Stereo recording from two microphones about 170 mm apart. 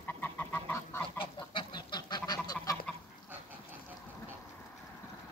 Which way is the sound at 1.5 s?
25° left (ahead or behind).